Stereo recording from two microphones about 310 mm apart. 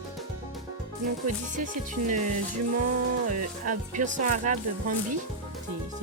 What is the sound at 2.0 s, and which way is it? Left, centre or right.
Speech, right.